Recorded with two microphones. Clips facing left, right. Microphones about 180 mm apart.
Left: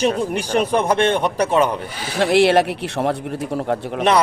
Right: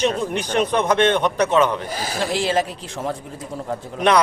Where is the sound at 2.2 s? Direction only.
70° left (ahead or behind).